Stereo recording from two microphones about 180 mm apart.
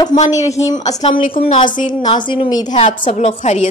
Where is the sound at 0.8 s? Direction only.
35° left (ahead or behind).